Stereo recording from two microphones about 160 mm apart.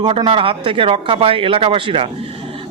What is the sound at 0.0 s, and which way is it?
Speech, 35° right (ahead or behind).